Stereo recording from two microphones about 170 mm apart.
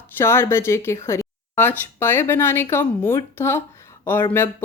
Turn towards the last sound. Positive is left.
turn(degrees=10)  # may be behind; listen again after turning